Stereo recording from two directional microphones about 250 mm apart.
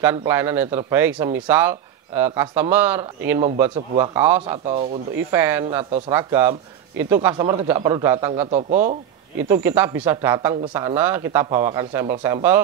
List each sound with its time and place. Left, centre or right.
0.0 s speech: centre
4.4 s a man's voice: right
5.3 s speech: centre
8.4 s a man's voice: right
9.5 s speech: centre